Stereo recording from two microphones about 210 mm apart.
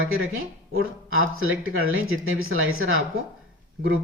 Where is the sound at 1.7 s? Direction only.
75° right (ahead or behind).